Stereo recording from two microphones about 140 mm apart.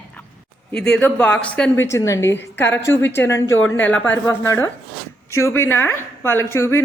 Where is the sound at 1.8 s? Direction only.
20° left (ahead or behind).